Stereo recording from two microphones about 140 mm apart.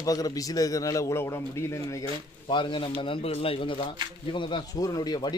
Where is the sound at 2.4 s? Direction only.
35° left (ahead or behind).